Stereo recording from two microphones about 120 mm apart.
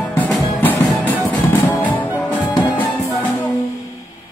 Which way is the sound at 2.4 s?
40° left (ahead or behind).